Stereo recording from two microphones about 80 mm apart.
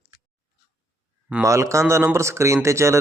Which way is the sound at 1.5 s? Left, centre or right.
Right.